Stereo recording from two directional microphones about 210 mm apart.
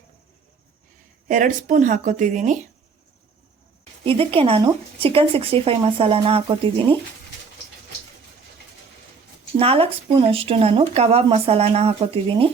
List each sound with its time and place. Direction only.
1.3 s speech: 40° right (ahead or behind)
4.0 s speech: 25° right (ahead or behind)
9.6 s speech: 25° right (ahead or behind)